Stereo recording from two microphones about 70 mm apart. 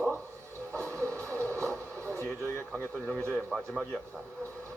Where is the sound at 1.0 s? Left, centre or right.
Right.